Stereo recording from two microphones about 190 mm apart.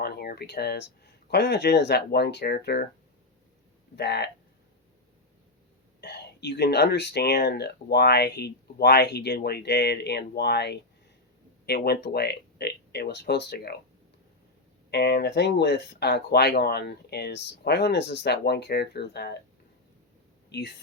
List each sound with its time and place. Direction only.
0.0 s speech: 55° left (ahead or behind)
3.9 s speech: 60° left (ahead or behind)
6.0 s speech: 60° left (ahead or behind)
14.8 s speech: 60° left (ahead or behind)